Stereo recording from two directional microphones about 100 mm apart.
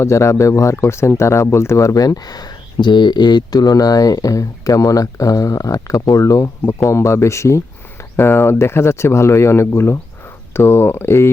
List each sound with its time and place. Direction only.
0.0 s speech: 30° left (ahead or behind)